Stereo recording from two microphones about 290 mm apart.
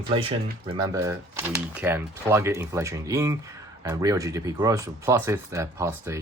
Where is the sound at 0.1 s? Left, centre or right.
Centre.